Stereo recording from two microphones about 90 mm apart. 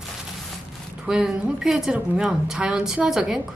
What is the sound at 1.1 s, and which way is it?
A woman's voice, 5° right (ahead or behind).